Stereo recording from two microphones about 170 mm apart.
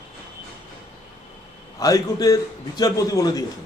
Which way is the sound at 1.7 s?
20° left (ahead or behind).